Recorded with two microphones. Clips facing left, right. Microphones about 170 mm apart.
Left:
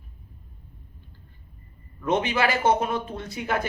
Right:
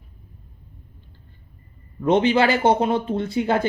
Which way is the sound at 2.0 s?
30° right (ahead or behind).